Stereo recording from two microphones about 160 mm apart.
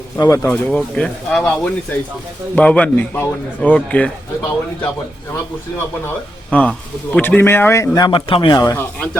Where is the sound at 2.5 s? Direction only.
5° left (ahead or behind).